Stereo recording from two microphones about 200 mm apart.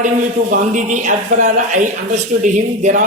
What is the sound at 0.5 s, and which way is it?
Speech, 40° right (ahead or behind).